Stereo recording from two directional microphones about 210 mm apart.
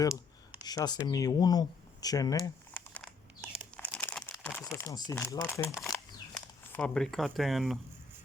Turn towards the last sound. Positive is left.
turn(degrees=0)  # may be behind; listen again after turning